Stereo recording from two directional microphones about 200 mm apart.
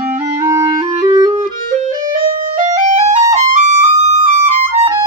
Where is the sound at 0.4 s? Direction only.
15° right (ahead or behind).